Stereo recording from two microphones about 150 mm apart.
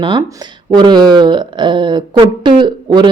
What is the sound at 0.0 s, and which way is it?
Speech, 30° right (ahead or behind).